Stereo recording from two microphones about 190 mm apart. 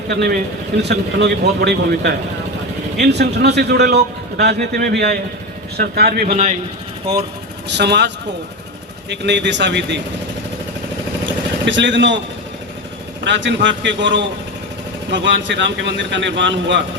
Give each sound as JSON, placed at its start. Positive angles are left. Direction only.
{"t": 0.1, "sound": "a man's voice", "side_deg": -55}
{"t": 6.2, "sound": "a man's voice", "side_deg": -35}
{"t": 7.7, "sound": "a man's voice", "side_deg": -65}
{"t": 11.6, "sound": "speech", "side_deg": -70}
{"t": 13.2, "sound": "speech", "side_deg": -70}